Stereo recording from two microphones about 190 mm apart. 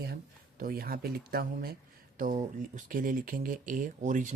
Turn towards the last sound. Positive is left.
turn(degrees=-40)  # may be behind; listen again after turning